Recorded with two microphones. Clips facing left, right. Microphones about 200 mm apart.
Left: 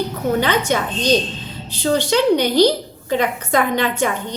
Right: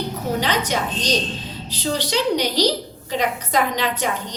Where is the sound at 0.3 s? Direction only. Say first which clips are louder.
Left 4 dB; 55° left (ahead or behind).